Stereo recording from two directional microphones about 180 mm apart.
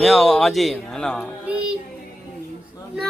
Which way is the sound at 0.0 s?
Centre (ahead or behind).